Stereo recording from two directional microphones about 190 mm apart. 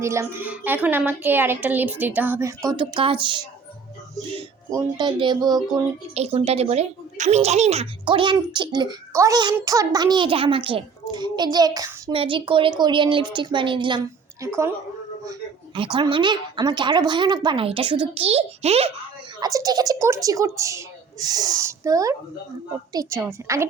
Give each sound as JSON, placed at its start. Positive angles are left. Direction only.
{"t": 0.0, "sound": "a woman's voice", "side_deg": -15}
{"t": 2.6, "sound": "speech", "side_deg": -25}
{"t": 6.1, "sound": "speech", "side_deg": -35}
{"t": 14.4, "sound": "a woman's voice", "side_deg": -15}
{"t": 19.4, "sound": "a woman's voice", "side_deg": -20}